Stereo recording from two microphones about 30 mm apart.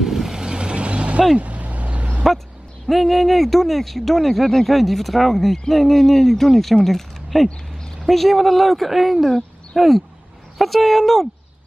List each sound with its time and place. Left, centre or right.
0.0 s vehicle: centre
0.5 s vehicle: right
1.4 s vehicle: right
2.9 s speech: centre